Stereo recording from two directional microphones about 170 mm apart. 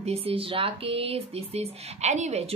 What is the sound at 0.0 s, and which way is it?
Speech, 35° right (ahead or behind).